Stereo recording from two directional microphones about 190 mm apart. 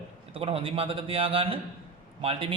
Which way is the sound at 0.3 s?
30° right (ahead or behind).